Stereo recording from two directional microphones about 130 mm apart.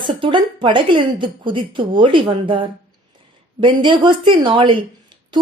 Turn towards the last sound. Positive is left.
turn(degrees=-40)  # may be behind; listen again after turning